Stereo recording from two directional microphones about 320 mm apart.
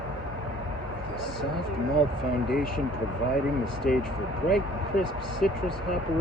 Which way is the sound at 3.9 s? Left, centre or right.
Left.